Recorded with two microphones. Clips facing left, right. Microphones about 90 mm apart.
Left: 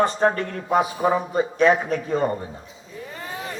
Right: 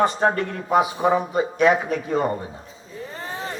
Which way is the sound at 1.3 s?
35° left (ahead or behind).